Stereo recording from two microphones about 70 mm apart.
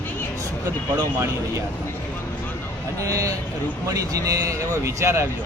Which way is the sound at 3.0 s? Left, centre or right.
Right.